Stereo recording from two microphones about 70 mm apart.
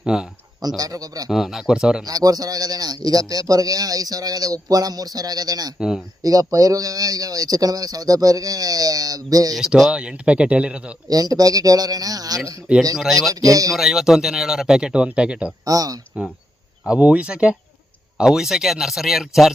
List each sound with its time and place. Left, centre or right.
0.0 s speech: centre
0.8 s speech: right
1.3 s speech: centre
2.0 s speech: right
9.6 s speech: centre
11.1 s speech: right
13.0 s speech: centre
13.3 s speech: right
13.7 s speech: centre
15.6 s speech: right
16.8 s speech: centre